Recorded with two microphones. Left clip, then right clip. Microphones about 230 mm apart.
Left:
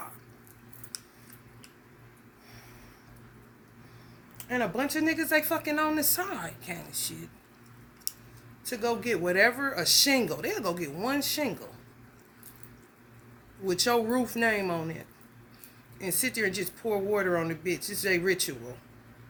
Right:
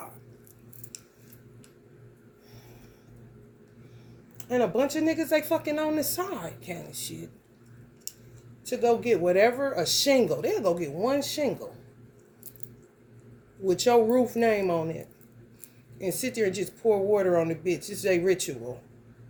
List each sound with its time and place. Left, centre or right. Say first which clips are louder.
4.4 s speech: right 5 dB; centre
8.6 s speech: right 6 dB; centre
13.8 s speech: right 6 dB; centre
16.0 s speech: right 2 dB; centre